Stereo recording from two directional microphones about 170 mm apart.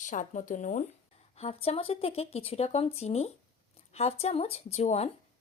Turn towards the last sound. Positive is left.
turn(degrees=40)  # may be behind; listen again after turning